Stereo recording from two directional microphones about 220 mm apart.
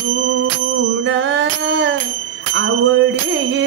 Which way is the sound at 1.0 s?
55° right (ahead or behind).